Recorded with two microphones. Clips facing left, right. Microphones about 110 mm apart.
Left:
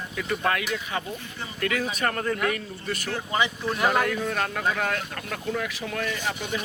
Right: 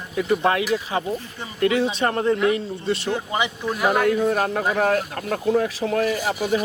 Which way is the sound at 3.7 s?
5° right (ahead or behind).